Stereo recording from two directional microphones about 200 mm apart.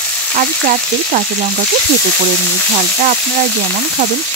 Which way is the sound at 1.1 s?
40° right (ahead or behind).